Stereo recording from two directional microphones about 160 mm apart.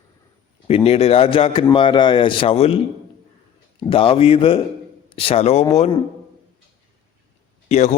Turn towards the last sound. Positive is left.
turn(degrees=45)  # may be behind; listen again after turning